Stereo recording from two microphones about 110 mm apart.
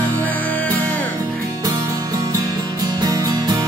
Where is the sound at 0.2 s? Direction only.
15° left (ahead or behind).